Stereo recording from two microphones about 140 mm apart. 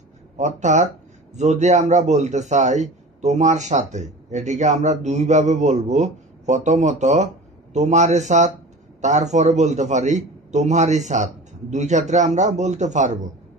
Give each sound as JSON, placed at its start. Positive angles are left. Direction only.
{"t": 0.4, "sound": "a man's voice", "side_deg": -55}